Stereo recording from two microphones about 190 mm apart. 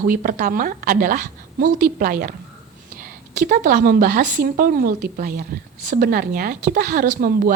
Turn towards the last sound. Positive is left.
turn(degrees=-50)  # may be behind; listen again after turning